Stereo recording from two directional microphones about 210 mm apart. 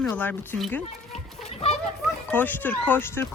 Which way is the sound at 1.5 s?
30° left (ahead or behind).